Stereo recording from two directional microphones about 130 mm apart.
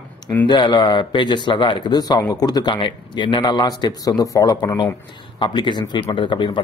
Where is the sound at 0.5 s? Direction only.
35° left (ahead or behind).